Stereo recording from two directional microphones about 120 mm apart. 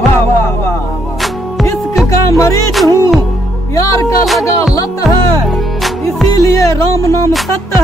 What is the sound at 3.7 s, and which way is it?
Speech, 25° left (ahead or behind).